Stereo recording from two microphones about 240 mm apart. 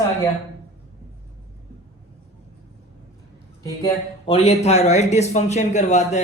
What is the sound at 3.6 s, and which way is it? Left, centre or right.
Speech, centre.